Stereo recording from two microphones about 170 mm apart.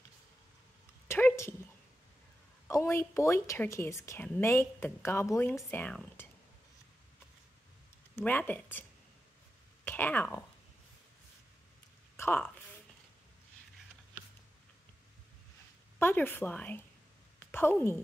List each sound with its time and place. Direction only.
1.0 s dog: 15° left (ahead or behind)
2.7 s speech: 15° left (ahead or behind)
8.2 s speech: 10° left (ahead or behind)
9.8 s speech: 10° left (ahead or behind)
12.2 s speech: 10° left (ahead or behind)
16.0 s a woman's voice: 10° left (ahead or behind)